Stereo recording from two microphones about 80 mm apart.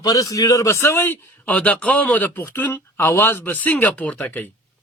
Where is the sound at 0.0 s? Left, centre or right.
Left.